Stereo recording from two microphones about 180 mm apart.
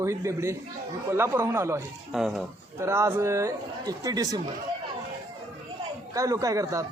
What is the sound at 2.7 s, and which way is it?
Speech, 15° right (ahead or behind).